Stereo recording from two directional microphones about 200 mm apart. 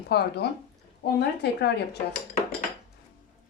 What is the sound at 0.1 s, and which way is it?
A woman's voice, 55° left (ahead or behind).